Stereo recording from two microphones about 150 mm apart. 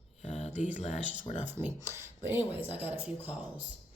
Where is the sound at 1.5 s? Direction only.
15° right (ahead or behind).